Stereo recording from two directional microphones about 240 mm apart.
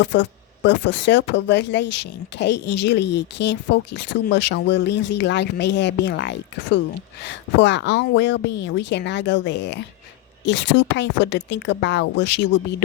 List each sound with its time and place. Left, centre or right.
0.0 s speech: left